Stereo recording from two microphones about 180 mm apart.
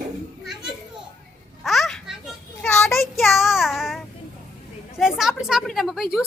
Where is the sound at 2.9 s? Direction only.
Centre (ahead or behind).